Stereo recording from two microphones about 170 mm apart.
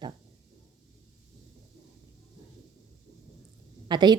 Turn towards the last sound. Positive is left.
turn(degrees=-25)  # may be behind; listen again after turning